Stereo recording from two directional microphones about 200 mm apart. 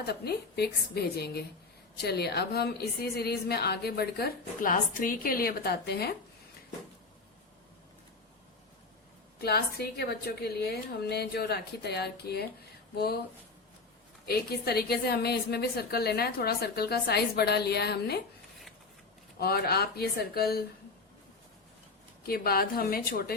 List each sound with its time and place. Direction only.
0.0 s a woman's voice: 55° left (ahead or behind)
9.4 s a woman's voice: 50° left (ahead or behind)
14.3 s a woman's voice: 50° left (ahead or behind)
19.4 s a woman's voice: 50° left (ahead or behind)
22.3 s a woman's voice: 50° left (ahead or behind)